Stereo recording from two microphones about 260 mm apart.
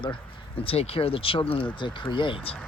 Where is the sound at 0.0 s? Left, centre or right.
Centre.